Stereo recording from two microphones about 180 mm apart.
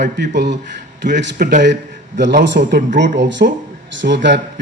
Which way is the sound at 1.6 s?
75° right (ahead or behind).